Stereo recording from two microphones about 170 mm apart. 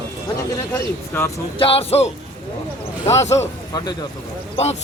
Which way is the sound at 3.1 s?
40° left (ahead or behind).